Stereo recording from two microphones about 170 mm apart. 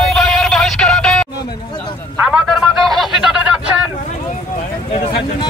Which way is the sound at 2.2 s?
Centre (ahead or behind).